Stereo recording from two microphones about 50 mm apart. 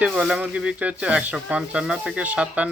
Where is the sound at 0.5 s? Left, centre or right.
Right.